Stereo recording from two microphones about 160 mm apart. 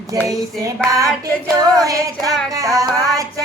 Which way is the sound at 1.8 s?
20° right (ahead or behind).